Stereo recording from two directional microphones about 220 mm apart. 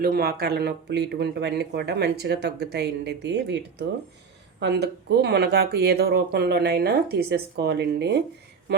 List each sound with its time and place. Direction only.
0.0 s speech: 45° right (ahead or behind)